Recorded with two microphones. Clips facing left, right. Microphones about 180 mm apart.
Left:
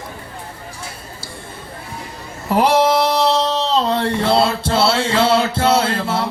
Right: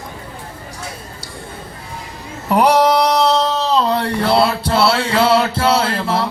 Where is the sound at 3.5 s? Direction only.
25° left (ahead or behind).